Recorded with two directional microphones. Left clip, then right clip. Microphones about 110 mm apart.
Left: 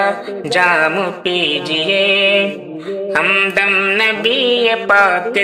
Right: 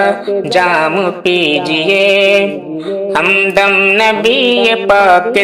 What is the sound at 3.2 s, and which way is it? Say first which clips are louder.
Mantra: right 4 dB; 25° right (ahead or behind).